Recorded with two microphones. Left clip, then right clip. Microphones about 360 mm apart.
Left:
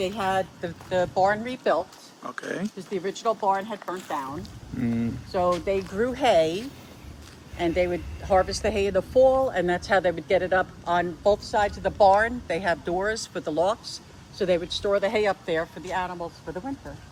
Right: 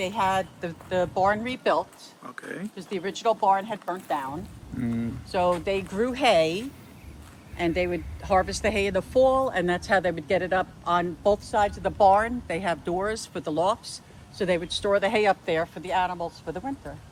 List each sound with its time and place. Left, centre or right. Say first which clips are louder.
0.0 s speech: right 1 dB; right
2.2 s speech: left 5 dB; centre
2.9 s speech: right 1 dB; right
4.8 s speech: left 2 dB; centre
5.3 s speech: even; right
7.6 s speech: left 2 dB; right